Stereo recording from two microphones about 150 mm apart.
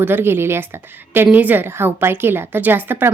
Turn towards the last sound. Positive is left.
turn(degrees=-15)  # may be behind; listen again after turning